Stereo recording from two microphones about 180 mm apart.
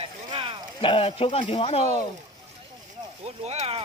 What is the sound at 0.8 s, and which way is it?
Speech, 30° left (ahead or behind).